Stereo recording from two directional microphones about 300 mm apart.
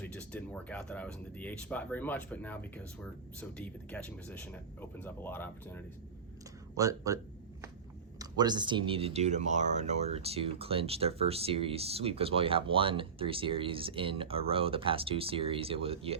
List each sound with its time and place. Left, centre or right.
0.0 s speech: centre
6.7 s speech: centre
8.2 s speech: centre